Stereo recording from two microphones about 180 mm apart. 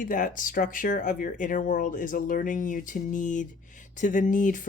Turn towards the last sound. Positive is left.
turn(degrees=45)  # may be behind; listen again after turning